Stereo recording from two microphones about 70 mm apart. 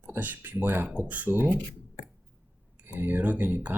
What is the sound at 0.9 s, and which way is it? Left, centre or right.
Speech, right.